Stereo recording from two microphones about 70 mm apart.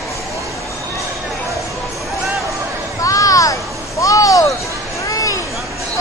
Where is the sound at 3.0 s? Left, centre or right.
Left.